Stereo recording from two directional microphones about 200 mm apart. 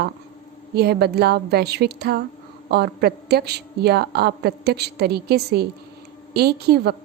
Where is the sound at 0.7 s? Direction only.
50° right (ahead or behind).